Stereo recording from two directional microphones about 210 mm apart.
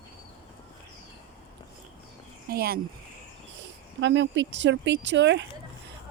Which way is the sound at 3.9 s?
60° right (ahead or behind).